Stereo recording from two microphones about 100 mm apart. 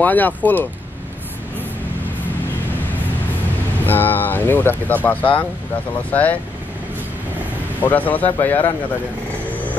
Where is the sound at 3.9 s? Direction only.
20° left (ahead or behind).